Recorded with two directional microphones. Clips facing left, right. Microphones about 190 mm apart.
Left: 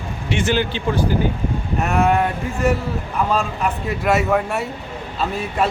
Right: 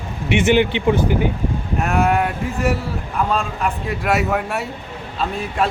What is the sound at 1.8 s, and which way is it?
A man's voice, centre (ahead or behind).